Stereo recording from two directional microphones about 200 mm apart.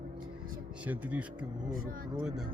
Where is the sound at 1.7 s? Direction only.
45° right (ahead or behind).